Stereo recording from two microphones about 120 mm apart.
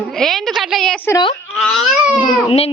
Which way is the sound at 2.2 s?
55° left (ahead or behind).